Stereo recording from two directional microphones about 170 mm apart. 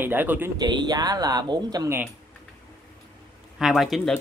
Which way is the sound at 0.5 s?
25° right (ahead or behind).